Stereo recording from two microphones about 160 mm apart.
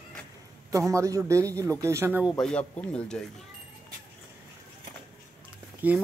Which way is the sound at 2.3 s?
5° left (ahead or behind).